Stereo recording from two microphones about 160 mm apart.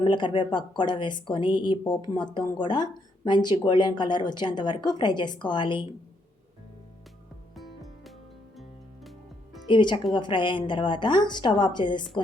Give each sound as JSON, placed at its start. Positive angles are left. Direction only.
{"t": 0.0, "sound": "speech", "side_deg": 30}
{"t": 7.5, "sound": "music", "side_deg": 0}
{"t": 9.6, "sound": "speech", "side_deg": 30}